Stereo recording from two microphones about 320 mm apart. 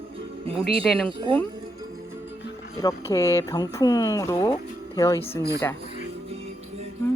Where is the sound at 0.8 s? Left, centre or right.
Centre.